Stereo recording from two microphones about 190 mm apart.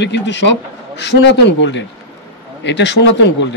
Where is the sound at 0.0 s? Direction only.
65° left (ahead or behind).